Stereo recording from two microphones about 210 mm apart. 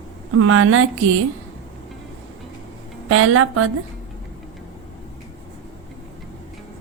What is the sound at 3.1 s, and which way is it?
Speech, 90° right.